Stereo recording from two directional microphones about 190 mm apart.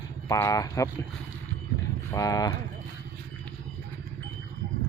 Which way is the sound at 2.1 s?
15° left (ahead or behind).